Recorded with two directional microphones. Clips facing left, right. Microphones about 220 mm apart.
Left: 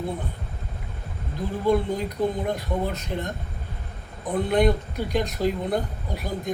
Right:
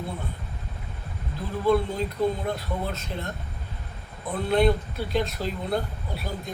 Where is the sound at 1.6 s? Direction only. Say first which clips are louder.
Even; 15° left (ahead or behind).